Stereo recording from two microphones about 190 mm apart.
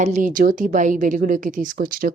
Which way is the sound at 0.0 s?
40° right (ahead or behind).